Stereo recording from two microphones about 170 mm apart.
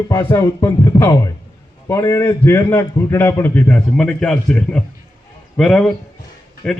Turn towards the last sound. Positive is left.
turn(degrees=5)  # may be behind; listen again after turning